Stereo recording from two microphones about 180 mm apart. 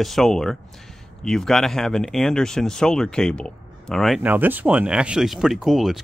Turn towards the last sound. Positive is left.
turn(degrees=0)  # may be behind; listen again after turning